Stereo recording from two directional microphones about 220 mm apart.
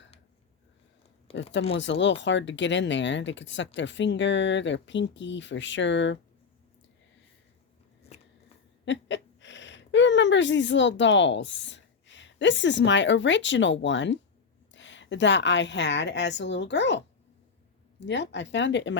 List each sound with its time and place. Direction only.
1.7 s speech: 55° left (ahead or behind)
8.8 s a woman's voice: 55° left (ahead or behind)
18.0 s speech: 55° left (ahead or behind)